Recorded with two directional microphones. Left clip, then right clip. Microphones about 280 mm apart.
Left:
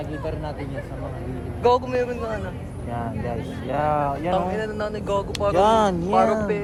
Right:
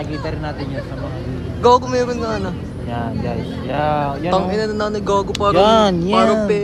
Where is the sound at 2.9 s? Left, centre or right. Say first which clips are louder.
Right 5 dB; right.